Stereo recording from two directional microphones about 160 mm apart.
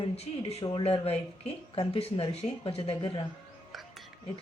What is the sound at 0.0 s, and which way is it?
Speech, 40° left (ahead or behind).